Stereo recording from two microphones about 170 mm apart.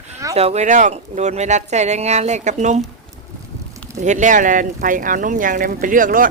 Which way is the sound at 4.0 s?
45° right (ahead or behind).